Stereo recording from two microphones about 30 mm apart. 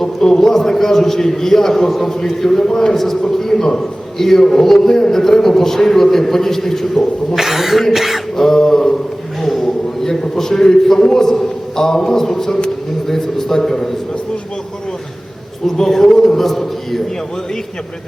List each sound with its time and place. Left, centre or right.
0.0 s a man's voice: centre
7.3 s speech: centre
8.4 s a man's voice: centre
9.4 s a sound: centre
10.1 s a man's voice: centre
15.6 s a man's voice: centre